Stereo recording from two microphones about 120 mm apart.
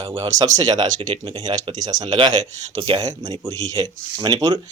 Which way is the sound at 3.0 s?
30° right (ahead or behind).